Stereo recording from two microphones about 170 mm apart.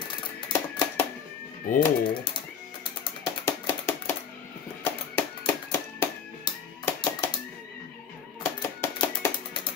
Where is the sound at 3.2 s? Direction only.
15° left (ahead or behind).